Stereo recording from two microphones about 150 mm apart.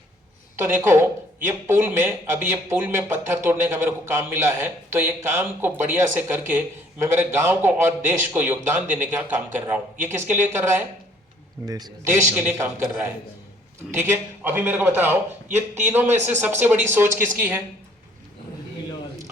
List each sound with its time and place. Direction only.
0.5 s speech: 15° right (ahead or behind)